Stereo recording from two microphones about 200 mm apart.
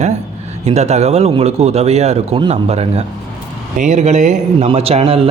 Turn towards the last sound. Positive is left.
turn(degrees=-30)  # may be behind; listen again after turning